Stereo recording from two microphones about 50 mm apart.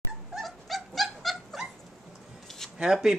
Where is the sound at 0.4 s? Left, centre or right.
Centre.